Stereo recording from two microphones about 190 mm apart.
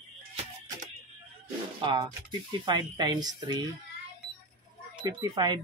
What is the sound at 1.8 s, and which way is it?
Speech, 25° right (ahead or behind).